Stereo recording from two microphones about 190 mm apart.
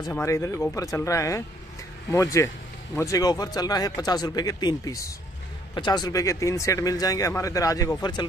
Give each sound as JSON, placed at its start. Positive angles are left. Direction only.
{"t": 0.1, "sound": "speech", "side_deg": 15}